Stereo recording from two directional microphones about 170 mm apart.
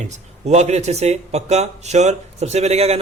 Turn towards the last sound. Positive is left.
turn(degrees=-40)  # may be behind; listen again after turning